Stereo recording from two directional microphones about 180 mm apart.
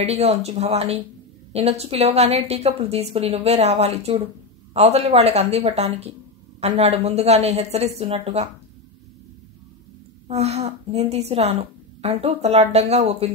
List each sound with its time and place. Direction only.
0.0 s a woman's voice: 35° right (ahead or behind)
10.2 s a woman's voice: 35° right (ahead or behind)